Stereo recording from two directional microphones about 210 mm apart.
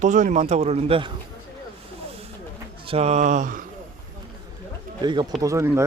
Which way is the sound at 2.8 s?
30° right (ahead or behind).